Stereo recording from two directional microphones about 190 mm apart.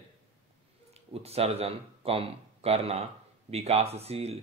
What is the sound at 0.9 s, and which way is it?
Speech, 35° right (ahead or behind).